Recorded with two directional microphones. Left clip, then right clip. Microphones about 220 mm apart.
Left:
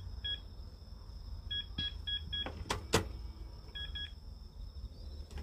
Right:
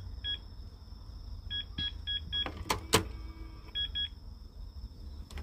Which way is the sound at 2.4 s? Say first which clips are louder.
Right 5 dB; 50° right (ahead or behind).